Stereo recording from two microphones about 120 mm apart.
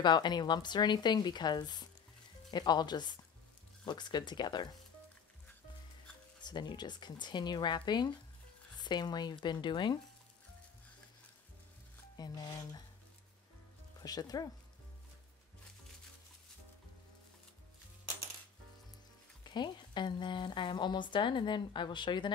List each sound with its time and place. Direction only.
0.0 s speech: 35° left (ahead or behind)
6.4 s speech: 40° left (ahead or behind)
12.2 s speech: 35° left (ahead or behind)
14.0 s speech: 35° left (ahead or behind)
19.4 s speech: 40° left (ahead or behind)